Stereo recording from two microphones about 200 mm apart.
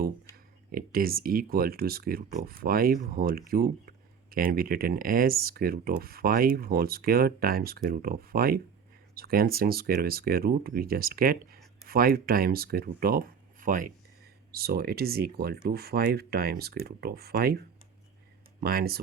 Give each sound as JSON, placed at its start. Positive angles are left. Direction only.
{"t": 0.7, "sound": "speech", "side_deg": -45}
{"t": 18.6, "sound": "speech", "side_deg": -50}